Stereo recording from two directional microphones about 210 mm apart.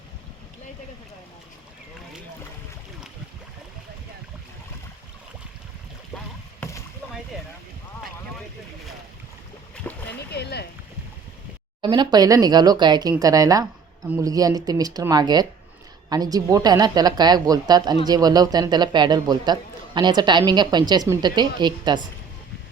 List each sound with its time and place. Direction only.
6.6 s rowboat: 15° left (ahead or behind)
10.1 s speech: 50° left (ahead or behind)
11.8 s a man's voice: 20° right (ahead or behind)